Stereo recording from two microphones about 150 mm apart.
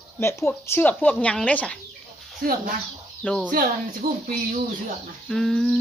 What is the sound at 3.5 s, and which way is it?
Speech, 75° right (ahead or behind).